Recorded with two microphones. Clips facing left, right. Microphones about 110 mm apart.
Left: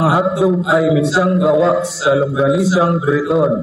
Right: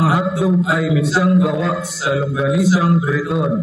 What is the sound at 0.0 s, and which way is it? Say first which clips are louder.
A man's voice: left 3 dB; 25° left (ahead or behind).